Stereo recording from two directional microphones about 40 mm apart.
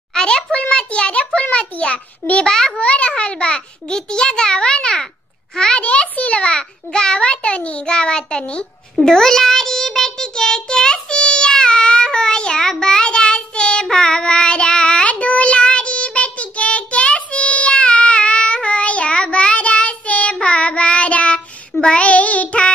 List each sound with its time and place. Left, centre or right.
0.1 s a child's voice: centre
2.4 s a child's voice: centre
2.8 s a child's voice: left
6.5 s a child's voice: centre
9.0 s child singing: centre; by 22.7 s left